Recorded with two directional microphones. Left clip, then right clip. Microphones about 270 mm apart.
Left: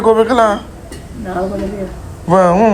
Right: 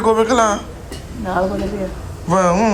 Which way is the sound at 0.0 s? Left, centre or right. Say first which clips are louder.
Left 4 dB; centre.